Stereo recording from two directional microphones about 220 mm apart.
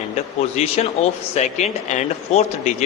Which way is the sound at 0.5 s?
30° left (ahead or behind).